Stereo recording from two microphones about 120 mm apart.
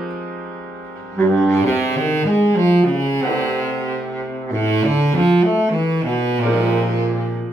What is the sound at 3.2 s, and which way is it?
Music, 20° left (ahead or behind).